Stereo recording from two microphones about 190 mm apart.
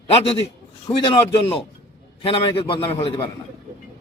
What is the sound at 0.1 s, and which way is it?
A man's voice, 30° left (ahead or behind).